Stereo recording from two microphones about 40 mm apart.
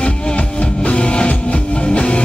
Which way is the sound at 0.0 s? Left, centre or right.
Left.